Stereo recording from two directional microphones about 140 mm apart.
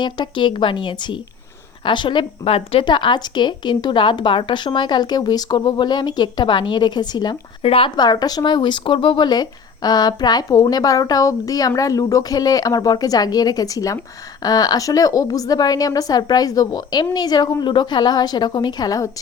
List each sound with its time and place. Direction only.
0.0 s a woman's voice: 35° left (ahead or behind)
7.6 s speech: 40° left (ahead or behind); by 19.1 s 25° left (ahead or behind)